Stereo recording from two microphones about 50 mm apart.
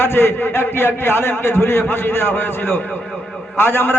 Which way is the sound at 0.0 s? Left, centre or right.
Left.